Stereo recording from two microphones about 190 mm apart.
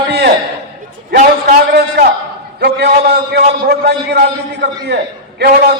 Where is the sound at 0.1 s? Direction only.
60° right (ahead or behind).